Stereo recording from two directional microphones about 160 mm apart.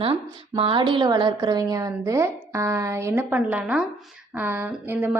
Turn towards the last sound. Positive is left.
turn(degrees=-10)  # may be behind; listen again after turning